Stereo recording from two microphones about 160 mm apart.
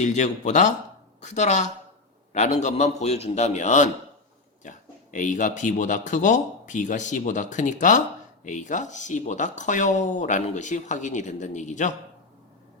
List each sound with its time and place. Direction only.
0.0 s speech: 50° left (ahead or behind)